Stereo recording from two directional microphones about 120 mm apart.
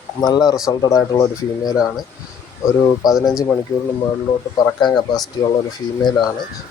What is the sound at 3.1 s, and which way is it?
Speech, centre (ahead or behind).